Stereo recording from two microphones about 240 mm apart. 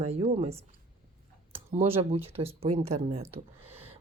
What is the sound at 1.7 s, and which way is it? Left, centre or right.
Speech, right.